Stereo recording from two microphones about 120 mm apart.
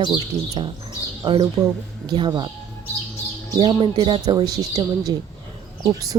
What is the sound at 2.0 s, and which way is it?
Speech, 40° right (ahead or behind).